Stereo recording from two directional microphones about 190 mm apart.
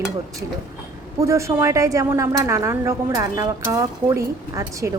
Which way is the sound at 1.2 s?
15° right (ahead or behind).